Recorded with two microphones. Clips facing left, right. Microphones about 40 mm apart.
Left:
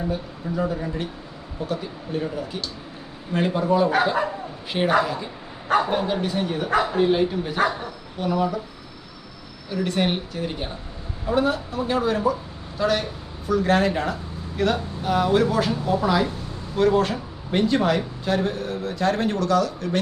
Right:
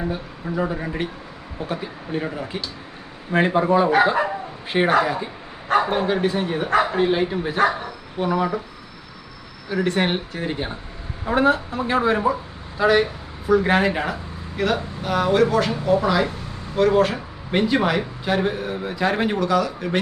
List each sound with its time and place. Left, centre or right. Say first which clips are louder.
0.1 s speech: even; centre
2.2 s speech: right 1 dB; right
5.7 s speech: right 2 dB; centre
9.7 s speech: right 4 dB; right
10.0 s speech: right 1 dB; right
11.3 s a man's voice: right 3 dB; right